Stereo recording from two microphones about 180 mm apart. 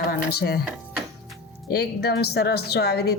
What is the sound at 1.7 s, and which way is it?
Speech, 65° left (ahead or behind).